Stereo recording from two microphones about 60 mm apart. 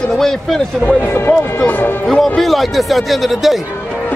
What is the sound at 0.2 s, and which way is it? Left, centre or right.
Speech, centre.